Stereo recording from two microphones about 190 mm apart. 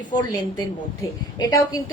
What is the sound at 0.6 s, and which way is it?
A woman's voice, 20° left (ahead or behind).